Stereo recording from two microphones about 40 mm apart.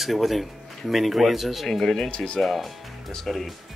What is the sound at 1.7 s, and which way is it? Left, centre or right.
Speech, centre.